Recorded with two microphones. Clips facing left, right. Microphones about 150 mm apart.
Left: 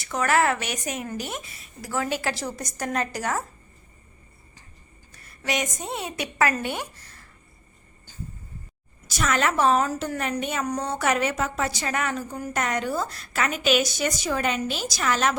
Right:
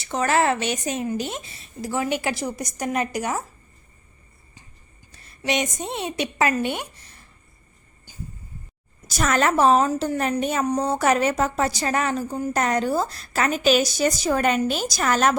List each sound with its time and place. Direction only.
0.0 s a woman's voice: 25° right (ahead or behind)
5.1 s a woman's voice: 25° right (ahead or behind)
9.0 s a woman's voice: 40° right (ahead or behind)